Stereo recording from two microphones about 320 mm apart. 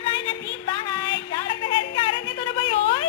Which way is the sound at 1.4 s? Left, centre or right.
Centre.